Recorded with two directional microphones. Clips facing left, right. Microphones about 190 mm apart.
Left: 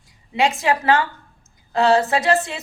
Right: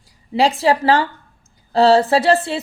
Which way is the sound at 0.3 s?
35° right (ahead or behind).